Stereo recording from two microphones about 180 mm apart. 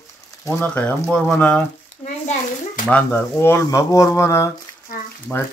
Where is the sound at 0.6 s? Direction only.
5° left (ahead or behind).